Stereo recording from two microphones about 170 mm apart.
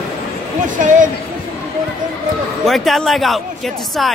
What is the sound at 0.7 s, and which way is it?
Speech, 50° right (ahead or behind).